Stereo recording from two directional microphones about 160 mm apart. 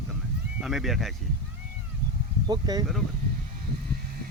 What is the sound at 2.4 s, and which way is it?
Speech, 25° right (ahead or behind).